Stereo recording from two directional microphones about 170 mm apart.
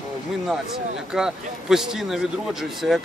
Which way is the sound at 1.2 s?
5° right (ahead or behind).